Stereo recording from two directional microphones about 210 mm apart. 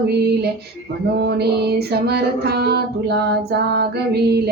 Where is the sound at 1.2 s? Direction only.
50° right (ahead or behind).